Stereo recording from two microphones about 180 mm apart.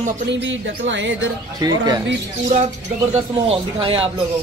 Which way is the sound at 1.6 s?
20° right (ahead or behind).